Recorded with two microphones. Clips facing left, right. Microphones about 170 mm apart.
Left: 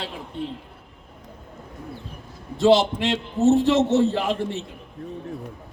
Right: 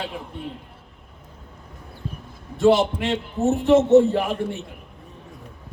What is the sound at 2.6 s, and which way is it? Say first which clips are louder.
A man's voice: even; 80° left.